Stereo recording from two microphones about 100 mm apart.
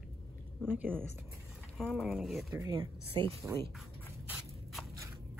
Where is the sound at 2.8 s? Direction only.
65° right (ahead or behind).